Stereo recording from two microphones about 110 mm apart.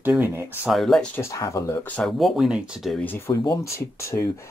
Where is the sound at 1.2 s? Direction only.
30° left (ahead or behind).